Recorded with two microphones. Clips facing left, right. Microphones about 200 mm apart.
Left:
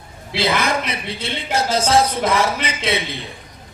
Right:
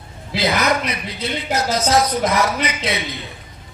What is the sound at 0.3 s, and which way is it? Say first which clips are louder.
A man's voice: right 1 dB; 30° left (ahead or behind).